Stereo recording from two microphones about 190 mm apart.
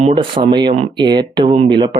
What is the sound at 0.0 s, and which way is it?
A man's voice, 25° right (ahead or behind).